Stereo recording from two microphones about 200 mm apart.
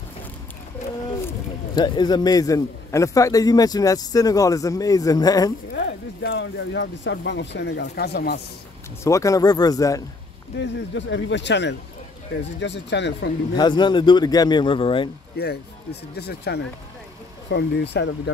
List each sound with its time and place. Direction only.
1.8 s a man's voice: 20° left (ahead or behind)
5.9 s speech: 65° left (ahead or behind)
9.0 s a man's voice: 15° left (ahead or behind)
10.6 s speech: 65° left (ahead or behind)
13.6 s a man's voice: 20° left (ahead or behind)
15.3 s speech: 55° left (ahead or behind)